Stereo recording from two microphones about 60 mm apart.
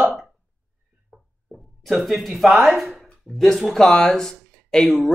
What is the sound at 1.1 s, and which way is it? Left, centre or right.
Music, centre.